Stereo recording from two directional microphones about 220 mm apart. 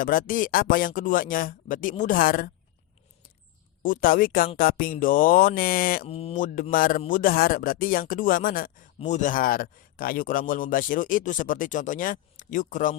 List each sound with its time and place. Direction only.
0.0 s speech: 40° left (ahead or behind)
3.8 s speech: 40° left (ahead or behind)
6.1 s speech: 25° left (ahead or behind)